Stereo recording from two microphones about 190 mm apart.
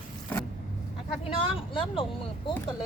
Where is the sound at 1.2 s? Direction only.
30° left (ahead or behind).